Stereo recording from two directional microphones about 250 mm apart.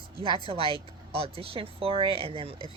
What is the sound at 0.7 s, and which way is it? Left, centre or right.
A woman's voice, right.